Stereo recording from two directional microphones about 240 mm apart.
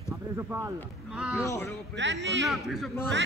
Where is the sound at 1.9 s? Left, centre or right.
Right.